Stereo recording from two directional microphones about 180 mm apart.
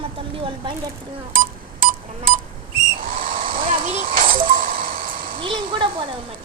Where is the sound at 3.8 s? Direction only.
50° right (ahead or behind).